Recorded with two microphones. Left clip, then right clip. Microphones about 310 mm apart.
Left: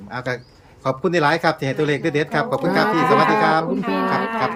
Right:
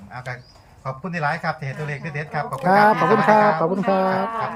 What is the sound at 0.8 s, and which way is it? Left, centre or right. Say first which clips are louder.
Speech: left 7 dB; left.